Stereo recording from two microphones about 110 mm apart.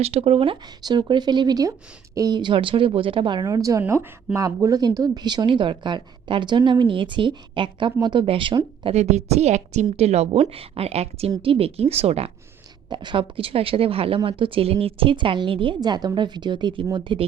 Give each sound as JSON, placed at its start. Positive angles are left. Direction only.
{"t": 0.0, "sound": "a woman's voice", "side_deg": -65}
{"t": 0.9, "sound": "speech", "side_deg": -40}
{"t": 3.4, "sound": "a woman's voice", "side_deg": -30}
{"t": 8.8, "sound": "a woman's voice", "side_deg": -80}
{"t": 11.4, "sound": "a woman's voice", "side_deg": -60}
{"t": 12.9, "sound": "a woman's voice", "side_deg": -45}